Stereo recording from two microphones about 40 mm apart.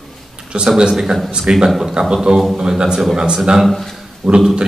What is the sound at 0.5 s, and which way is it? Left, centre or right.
Speech, right.